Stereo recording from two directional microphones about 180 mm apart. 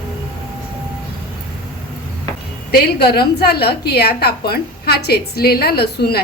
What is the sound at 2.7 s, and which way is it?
A woman's voice, 60° left (ahead or behind).